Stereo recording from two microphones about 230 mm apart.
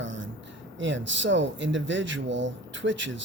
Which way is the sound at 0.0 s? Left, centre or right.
Right.